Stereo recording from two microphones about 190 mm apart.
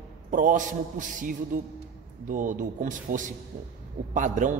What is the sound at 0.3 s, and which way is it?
A man's voice, 45° right (ahead or behind).